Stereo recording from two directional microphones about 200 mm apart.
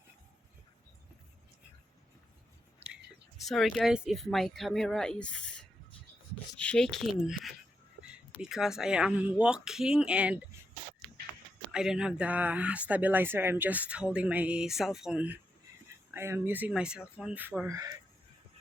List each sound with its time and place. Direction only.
3.5 s speech: centre (ahead or behind)
8.4 s speech: centre (ahead or behind)
11.7 s speech: 5° right (ahead or behind)